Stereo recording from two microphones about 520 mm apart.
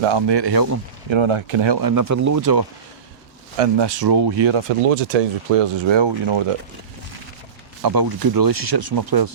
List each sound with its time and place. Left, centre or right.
0.0 s speech: right
1.1 s speech: right
3.8 s speech: right
4.5 s speech: right
5.9 s speech: right
7.8 s speech: right